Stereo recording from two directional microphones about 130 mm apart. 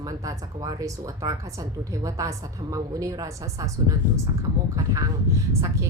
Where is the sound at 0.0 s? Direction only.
25° right (ahead or behind).